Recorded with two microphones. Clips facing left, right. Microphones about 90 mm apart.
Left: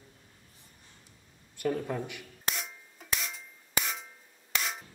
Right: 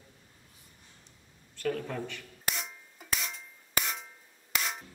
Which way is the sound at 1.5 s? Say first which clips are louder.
Left 2 dB; 15° left (ahead or behind).